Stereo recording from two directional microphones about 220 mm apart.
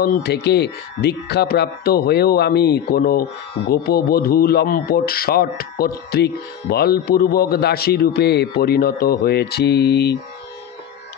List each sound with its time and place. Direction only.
0.0 s speech: 45° left (ahead or behind)